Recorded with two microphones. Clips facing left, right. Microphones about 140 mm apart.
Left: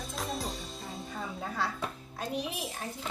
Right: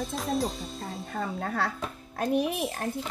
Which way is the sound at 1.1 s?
60° right (ahead or behind).